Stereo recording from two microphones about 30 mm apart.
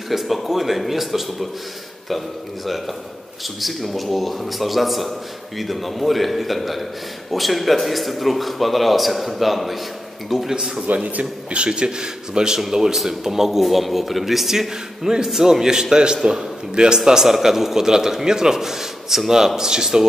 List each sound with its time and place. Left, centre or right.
0.1 s speech: centre
10.9 s a man's voice: right
11.5 s a man's voice: right
12.7 s a man's voice: centre
17.3 s a man's voice: centre